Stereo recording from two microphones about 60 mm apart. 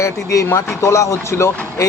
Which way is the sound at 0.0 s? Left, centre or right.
Left.